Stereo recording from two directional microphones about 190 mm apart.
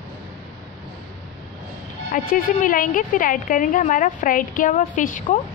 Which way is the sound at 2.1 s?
45° left (ahead or behind).